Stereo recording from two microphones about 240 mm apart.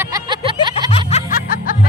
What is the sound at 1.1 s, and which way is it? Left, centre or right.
Music, left.